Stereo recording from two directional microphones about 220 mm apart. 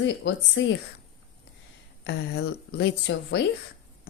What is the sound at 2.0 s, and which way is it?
Speech, 50° left (ahead or behind).